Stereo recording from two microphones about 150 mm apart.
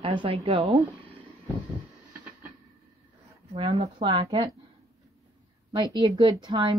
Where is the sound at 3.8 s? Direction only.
35° right (ahead or behind).